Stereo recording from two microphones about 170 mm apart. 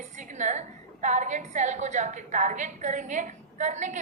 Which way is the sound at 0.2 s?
45° right (ahead or behind).